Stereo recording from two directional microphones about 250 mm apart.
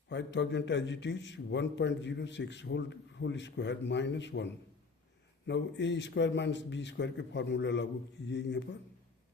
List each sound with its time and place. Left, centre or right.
0.1 s a man's voice: left